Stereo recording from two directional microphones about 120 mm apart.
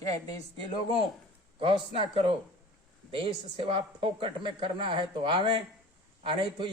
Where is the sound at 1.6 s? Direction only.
50° right (ahead or behind).